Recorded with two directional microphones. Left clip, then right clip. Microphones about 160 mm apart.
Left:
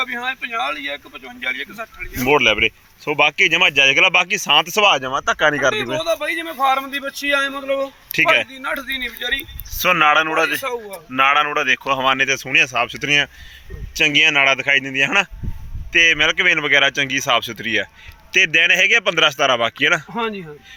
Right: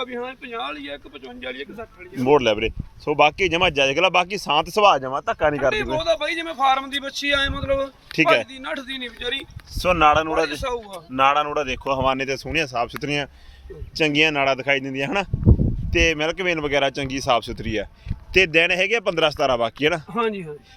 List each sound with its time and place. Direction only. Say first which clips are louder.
0.0 s speech: left 7 dB; 25° left (ahead or behind)
2.2 s speech: left 3 dB; 5° right (ahead or behind)
6.0 s a man's voice: left 1 dB; 45° left (ahead or behind)
9.8 s speech: left 3 dB; 5° right (ahead or behind)
10.5 s a man's voice: left 4 dB; 35° left (ahead or behind)
11.1 s a man's voice: left 3 dB; centre (ahead or behind)